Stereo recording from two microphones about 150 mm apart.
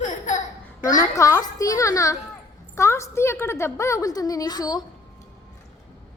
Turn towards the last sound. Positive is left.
turn(degrees=25)  # may be behind; listen again after turning